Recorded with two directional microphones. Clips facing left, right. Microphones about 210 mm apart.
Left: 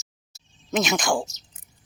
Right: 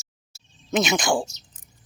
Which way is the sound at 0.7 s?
Centre (ahead or behind).